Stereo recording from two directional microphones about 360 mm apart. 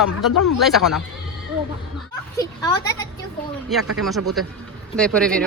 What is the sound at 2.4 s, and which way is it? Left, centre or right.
Speech, centre.